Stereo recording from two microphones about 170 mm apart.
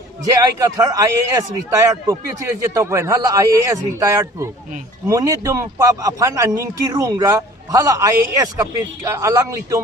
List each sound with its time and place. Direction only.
0.3 s a man's voice: 20° right (ahead or behind)